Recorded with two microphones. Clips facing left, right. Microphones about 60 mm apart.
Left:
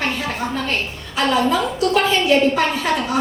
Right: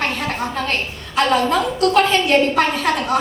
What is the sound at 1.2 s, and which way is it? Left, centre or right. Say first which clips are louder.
A woman's voice: right 1 dB; right.